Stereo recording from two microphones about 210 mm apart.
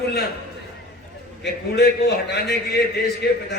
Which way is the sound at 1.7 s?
50° left (ahead or behind).